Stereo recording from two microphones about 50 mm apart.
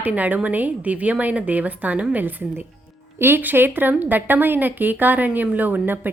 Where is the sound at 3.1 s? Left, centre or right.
Right.